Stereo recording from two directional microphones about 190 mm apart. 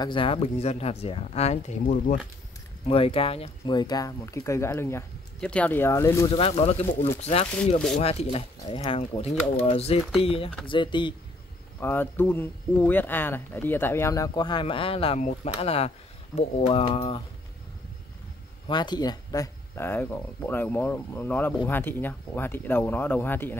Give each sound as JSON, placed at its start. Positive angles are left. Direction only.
{"t": 0.0, "sound": "speech", "side_deg": 25}
{"t": 2.9, "sound": "speech", "side_deg": 30}
{"t": 6.3, "sound": "speech", "side_deg": 30}
{"t": 11.8, "sound": "speech", "side_deg": 10}
{"t": 18.7, "sound": "speech", "side_deg": 20}